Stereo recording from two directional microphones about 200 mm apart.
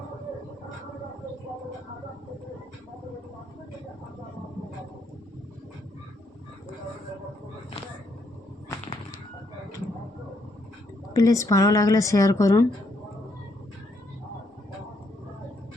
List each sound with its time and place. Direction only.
11.1 s speech: 15° left (ahead or behind)